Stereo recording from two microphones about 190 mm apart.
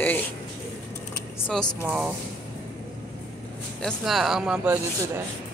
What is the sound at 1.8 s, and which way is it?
Speech, 5° right (ahead or behind).